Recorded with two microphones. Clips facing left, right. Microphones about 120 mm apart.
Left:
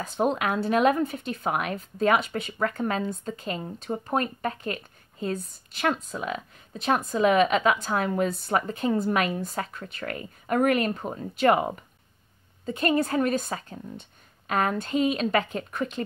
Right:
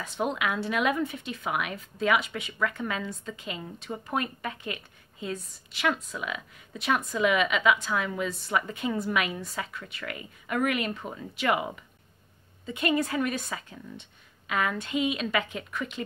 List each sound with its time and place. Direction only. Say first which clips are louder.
0.0 s speech: left 4 dB; 40° left (ahead or behind)